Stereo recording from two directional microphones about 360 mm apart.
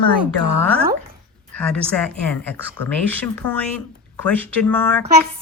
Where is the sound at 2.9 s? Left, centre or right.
Centre.